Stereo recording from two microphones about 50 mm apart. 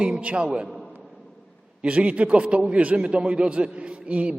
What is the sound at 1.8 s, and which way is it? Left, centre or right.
A man's voice, right.